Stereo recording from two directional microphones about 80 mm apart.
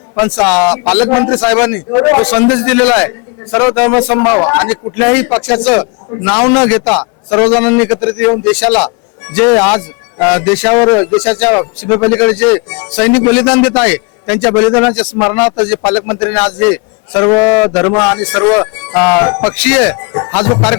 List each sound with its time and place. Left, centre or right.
0.2 s speech: centre